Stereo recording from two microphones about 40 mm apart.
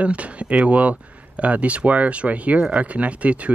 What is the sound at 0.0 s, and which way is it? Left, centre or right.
Speech, right.